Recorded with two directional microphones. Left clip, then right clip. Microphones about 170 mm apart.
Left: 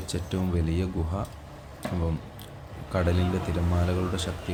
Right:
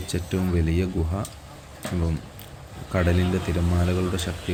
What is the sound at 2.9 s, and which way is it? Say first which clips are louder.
Speech: right 3 dB; 10° right (ahead or behind).